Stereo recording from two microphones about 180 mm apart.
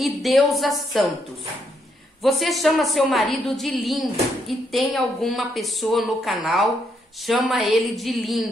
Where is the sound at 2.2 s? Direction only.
Centre (ahead or behind).